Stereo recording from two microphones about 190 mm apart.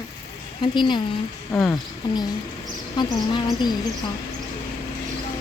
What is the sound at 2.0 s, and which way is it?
Speech, 25° left (ahead or behind).